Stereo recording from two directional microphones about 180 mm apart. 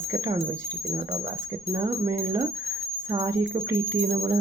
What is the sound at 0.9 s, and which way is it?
Speech, 30° right (ahead or behind).